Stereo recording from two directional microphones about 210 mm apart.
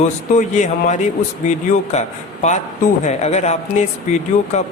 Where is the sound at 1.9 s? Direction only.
30° left (ahead or behind).